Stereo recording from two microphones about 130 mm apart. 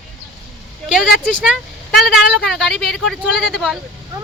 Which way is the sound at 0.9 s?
5° right (ahead or behind).